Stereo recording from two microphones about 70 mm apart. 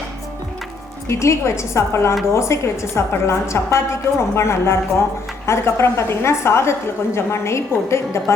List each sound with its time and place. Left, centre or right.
1.0 s a woman's voice: left